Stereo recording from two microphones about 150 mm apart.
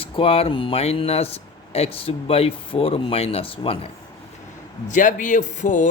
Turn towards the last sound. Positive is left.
turn(degrees=55)  # may be behind; listen again after turning